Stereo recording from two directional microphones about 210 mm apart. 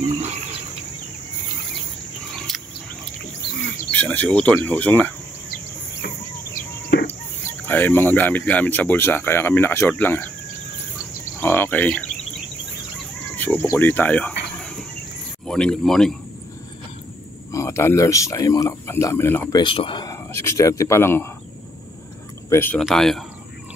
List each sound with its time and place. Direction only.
2.3 s a sound: centre (ahead or behind)
3.9 s speech: 5° left (ahead or behind)
6.9 s bird: 60° left (ahead or behind)
7.6 s speech: 10° left (ahead or behind)
11.3 s speech: 10° left (ahead or behind)
13.4 s speech: 10° left (ahead or behind)
17.5 s speech: 15° left (ahead or behind)
19.6 s speech: 25° left (ahead or behind)
22.5 s speech: 10° left (ahead or behind)